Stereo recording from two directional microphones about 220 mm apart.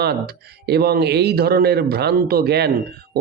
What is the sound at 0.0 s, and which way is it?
Speech, 45° right (ahead or behind).